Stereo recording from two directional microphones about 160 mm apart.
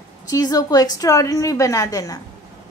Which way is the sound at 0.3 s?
25° left (ahead or behind).